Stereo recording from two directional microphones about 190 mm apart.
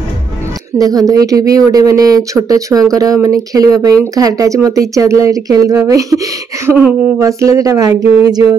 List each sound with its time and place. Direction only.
0.7 s speech: 20° right (ahead or behind)